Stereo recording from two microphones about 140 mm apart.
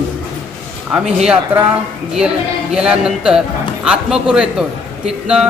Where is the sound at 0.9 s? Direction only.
5° right (ahead or behind).